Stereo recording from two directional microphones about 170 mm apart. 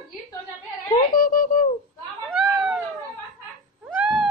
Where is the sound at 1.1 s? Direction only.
55° left (ahead or behind).